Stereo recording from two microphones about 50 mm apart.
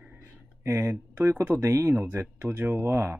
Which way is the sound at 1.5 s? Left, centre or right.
Right.